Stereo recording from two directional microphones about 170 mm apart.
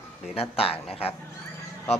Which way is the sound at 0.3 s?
35° left (ahead or behind).